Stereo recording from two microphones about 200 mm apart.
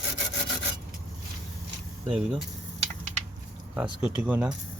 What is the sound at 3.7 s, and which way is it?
Speech, 5° right (ahead or behind).